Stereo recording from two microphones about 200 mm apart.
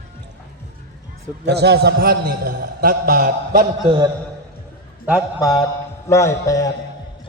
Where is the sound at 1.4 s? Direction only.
55° right (ahead or behind).